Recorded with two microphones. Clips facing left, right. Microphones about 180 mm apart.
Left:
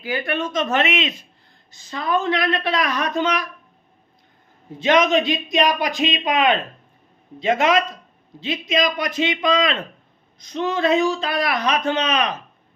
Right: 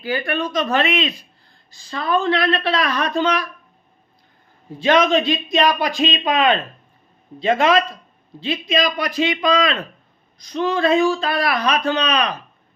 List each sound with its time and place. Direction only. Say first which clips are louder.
0.1 s a man's voice: right 2 dB; 20° left (ahead or behind)
4.8 s a man's voice: right 1 dB; 15° left (ahead or behind)